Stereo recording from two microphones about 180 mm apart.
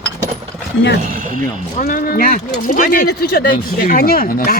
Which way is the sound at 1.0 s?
45° right (ahead or behind).